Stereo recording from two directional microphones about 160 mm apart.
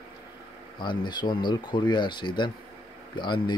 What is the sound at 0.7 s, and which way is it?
Speech, 30° left (ahead or behind).